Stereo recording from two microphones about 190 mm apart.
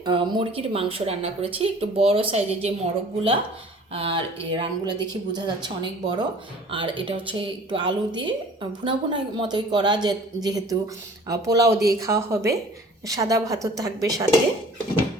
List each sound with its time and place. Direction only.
0.0 s a woman's voice: 25° right (ahead or behind)
3.9 s a woman's voice: 25° right (ahead or behind)